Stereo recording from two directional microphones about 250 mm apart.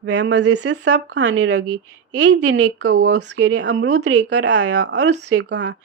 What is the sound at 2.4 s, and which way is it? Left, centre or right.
Speech, right.